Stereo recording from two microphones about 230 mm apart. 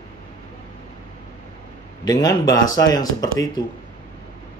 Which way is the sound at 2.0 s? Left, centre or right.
Centre.